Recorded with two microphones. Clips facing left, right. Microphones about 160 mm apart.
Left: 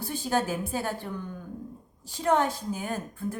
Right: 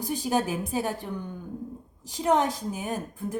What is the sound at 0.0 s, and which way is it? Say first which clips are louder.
Speech: right 2 dB; 15° right (ahead or behind).